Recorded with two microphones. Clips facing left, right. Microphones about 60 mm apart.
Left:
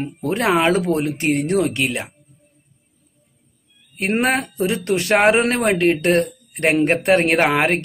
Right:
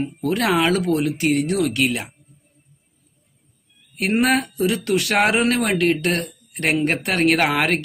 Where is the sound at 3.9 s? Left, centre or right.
Left.